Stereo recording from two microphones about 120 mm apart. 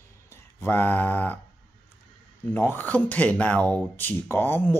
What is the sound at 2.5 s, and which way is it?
Speech, 15° left (ahead or behind).